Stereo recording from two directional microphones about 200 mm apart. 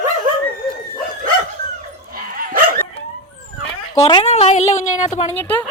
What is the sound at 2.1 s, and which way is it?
Dog, 45° right (ahead or behind).